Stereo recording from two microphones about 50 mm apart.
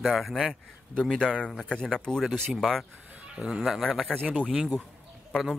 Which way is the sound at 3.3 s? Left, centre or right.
Centre.